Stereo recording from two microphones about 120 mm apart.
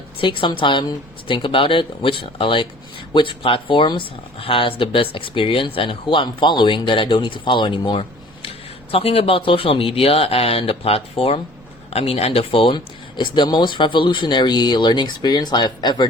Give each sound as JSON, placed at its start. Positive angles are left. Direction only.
{"t": 0.2, "sound": "speech", "side_deg": 45}
{"t": 8.9, "sound": "speech", "side_deg": 50}